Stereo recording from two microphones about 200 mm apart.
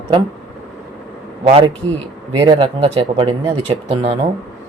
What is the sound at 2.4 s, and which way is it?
Speech, 20° right (ahead or behind).